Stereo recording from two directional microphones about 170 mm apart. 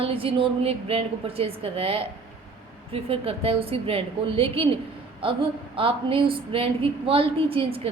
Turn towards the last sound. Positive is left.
turn(degrees=-35)  # may be behind; listen again after turning